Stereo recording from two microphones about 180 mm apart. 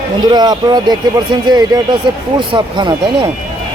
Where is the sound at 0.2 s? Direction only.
25° right (ahead or behind).